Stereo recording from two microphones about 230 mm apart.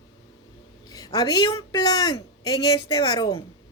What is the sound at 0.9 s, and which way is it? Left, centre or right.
A woman's voice, centre.